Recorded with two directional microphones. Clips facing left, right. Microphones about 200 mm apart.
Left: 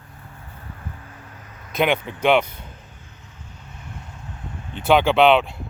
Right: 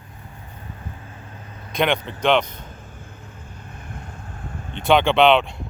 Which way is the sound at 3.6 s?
55° right (ahead or behind).